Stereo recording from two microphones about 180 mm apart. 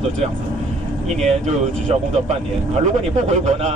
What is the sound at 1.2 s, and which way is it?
Speech, 35° right (ahead or behind).